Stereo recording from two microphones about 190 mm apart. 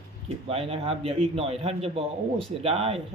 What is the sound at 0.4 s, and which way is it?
A man's voice, 30° right (ahead or behind).